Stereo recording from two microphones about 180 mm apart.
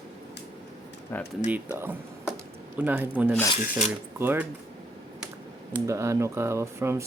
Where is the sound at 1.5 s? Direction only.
10° right (ahead or behind).